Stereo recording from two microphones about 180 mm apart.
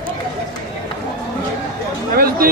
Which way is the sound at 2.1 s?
55° right (ahead or behind).